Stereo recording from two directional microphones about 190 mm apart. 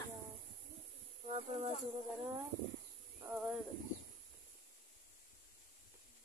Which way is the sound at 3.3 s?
5° right (ahead or behind).